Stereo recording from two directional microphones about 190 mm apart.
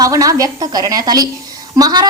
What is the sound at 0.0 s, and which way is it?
A woman's voice, 20° right (ahead or behind).